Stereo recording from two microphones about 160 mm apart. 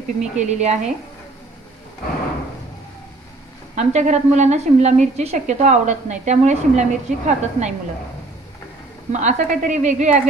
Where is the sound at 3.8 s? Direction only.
45° right (ahead or behind).